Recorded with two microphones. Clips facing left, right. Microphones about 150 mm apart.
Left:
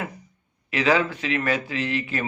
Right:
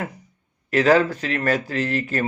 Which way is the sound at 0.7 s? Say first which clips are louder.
Right 5 dB; 40° right (ahead or behind).